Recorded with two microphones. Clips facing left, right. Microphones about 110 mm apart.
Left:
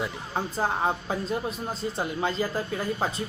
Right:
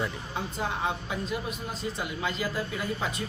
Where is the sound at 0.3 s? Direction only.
35° left (ahead or behind).